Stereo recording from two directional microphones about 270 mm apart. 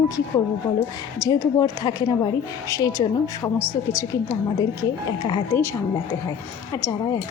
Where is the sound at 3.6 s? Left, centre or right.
Centre.